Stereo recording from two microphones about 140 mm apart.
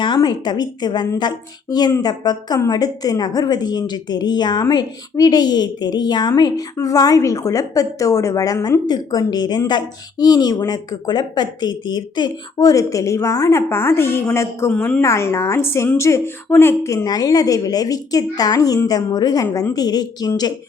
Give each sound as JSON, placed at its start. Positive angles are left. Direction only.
{"t": 0.0, "sound": "a woman's voice", "side_deg": 30}
{"t": 14.7, "sound": "a woman's voice", "side_deg": 10}
{"t": 15.0, "sound": "a woman's voice", "side_deg": 20}